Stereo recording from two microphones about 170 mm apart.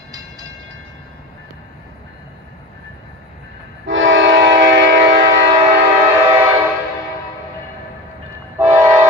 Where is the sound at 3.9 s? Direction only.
90° right.